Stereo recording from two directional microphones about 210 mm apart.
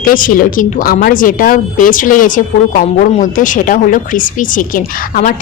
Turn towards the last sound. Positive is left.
turn(degrees=40)  # may be behind; listen again after turning